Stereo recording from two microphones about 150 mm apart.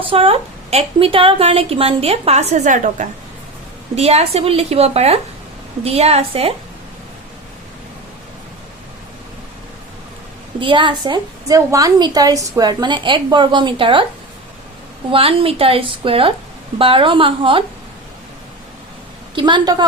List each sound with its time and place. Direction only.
0.1 s a woman's voice: 40° right (ahead or behind); by 3.1 s 55° right (ahead or behind)
3.9 s a woman's voice: 45° right (ahead or behind)
10.6 s a woman's voice: 35° right (ahead or behind)
15.1 s a woman's voice: 40° right (ahead or behind)
19.4 s a woman's voice: 30° right (ahead or behind)